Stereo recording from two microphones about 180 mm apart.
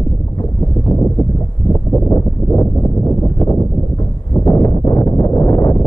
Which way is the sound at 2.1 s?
15° left (ahead or behind).